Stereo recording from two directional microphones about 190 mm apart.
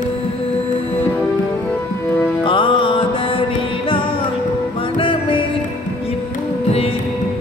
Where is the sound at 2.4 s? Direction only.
25° left (ahead or behind).